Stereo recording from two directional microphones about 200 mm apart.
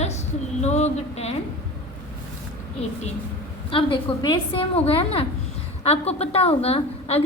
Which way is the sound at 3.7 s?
25° left (ahead or behind).